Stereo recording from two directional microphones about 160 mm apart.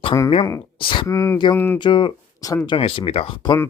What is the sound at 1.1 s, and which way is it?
Speech, 20° left (ahead or behind).